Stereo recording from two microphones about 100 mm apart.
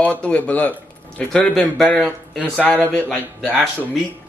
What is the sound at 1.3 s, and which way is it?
Speech, 5° left (ahead or behind).